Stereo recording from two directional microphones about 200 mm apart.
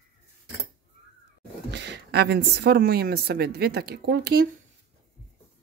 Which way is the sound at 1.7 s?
60° right (ahead or behind).